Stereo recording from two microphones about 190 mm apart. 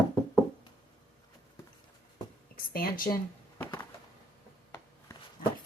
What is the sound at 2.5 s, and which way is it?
Speech, 50° left (ahead or behind).